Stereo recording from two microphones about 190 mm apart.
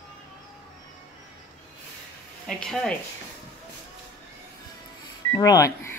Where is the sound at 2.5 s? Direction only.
5° left (ahead or behind).